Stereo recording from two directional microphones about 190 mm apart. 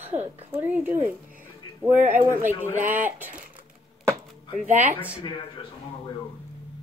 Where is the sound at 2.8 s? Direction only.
10° right (ahead or behind).